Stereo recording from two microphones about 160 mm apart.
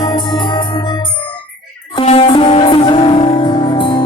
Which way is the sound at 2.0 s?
35° left (ahead or behind).